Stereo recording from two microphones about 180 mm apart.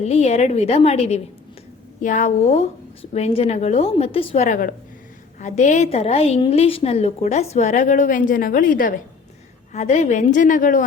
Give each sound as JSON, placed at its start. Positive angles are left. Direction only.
{"t": 0.0, "sound": "a woman's voice", "side_deg": 35}
{"t": 9.7, "sound": "a woman's voice", "side_deg": 40}